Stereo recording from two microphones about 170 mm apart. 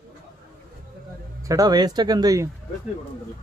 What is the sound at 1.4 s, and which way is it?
Speech, 20° right (ahead or behind).